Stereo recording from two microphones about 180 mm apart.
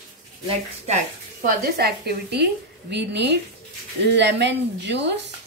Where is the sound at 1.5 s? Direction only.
60° right (ahead or behind).